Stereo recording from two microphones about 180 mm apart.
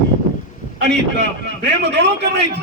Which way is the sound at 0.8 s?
70° right (ahead or behind).